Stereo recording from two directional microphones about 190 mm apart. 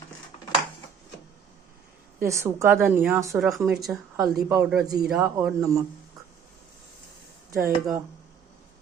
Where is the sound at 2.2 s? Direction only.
15° right (ahead or behind).